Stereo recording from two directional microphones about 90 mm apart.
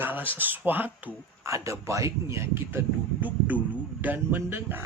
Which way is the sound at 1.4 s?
35° right (ahead or behind).